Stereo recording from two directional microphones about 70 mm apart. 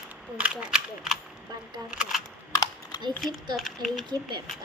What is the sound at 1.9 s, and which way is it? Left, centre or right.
Speech, centre.